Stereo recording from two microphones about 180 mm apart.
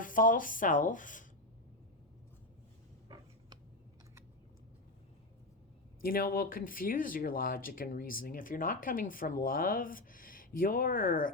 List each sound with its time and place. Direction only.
0.0 s speech: 50° left (ahead or behind)
6.0 s speech: 55° left (ahead or behind)